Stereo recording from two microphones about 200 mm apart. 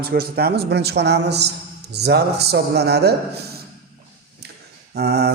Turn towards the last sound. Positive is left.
turn(degrees=-55)  # may be behind; listen again after turning